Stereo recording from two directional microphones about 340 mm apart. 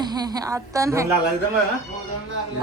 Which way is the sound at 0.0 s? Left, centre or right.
Centre.